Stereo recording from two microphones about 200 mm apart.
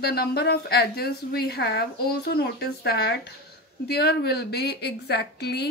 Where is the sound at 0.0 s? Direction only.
50° left (ahead or behind).